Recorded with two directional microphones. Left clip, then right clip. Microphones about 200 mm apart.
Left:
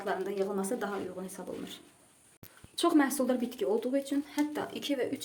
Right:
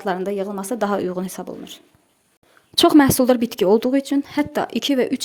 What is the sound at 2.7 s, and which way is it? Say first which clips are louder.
Speech: right 14 dB; 50° right (ahead or behind).